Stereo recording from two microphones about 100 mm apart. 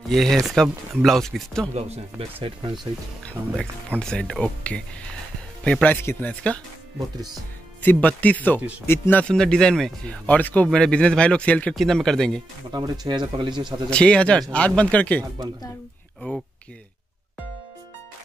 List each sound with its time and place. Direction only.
0.1 s speech: 5° left (ahead or behind)
2.4 s speech: 55° right (ahead or behind)
3.9 s speech: 10° left (ahead or behind)
7.8 s speech: 15° left (ahead or behind)
9.3 s speech: 5° left (ahead or behind)
11.7 s speech: centre (ahead or behind)
12.7 s speech: 40° right (ahead or behind)
13.8 s speech: 10° left (ahead or behind)